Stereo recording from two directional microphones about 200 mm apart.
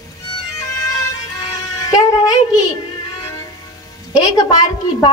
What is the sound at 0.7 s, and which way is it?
Music, 15° left (ahead or behind).